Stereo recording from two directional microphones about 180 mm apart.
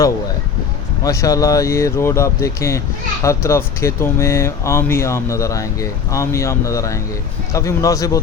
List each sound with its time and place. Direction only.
1.0 s speech: 20° left (ahead or behind)